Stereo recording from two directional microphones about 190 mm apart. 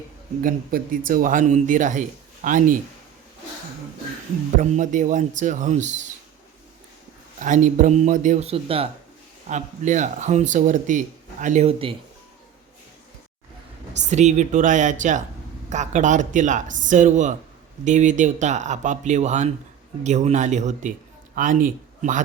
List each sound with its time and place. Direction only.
0.4 s speech: 45° right (ahead or behind)
4.5 s speech: 40° right (ahead or behind)
7.4 s speech: 40° right (ahead or behind)
13.9 s a man's voice: 40° right (ahead or behind)